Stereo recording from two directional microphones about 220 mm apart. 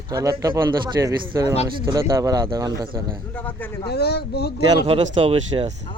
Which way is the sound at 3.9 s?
45° left (ahead or behind).